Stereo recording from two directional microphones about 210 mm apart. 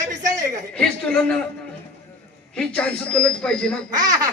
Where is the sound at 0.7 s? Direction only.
5° left (ahead or behind).